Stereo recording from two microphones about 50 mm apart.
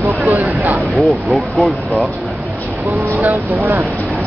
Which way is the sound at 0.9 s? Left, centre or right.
Centre.